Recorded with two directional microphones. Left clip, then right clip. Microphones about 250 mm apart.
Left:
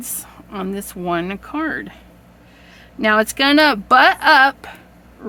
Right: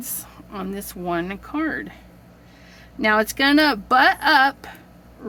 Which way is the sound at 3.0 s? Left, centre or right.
Centre.